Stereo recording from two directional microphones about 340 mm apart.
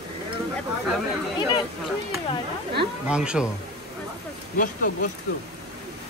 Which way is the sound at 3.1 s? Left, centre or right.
Centre.